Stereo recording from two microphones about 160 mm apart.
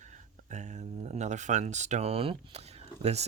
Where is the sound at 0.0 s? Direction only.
50° right (ahead or behind).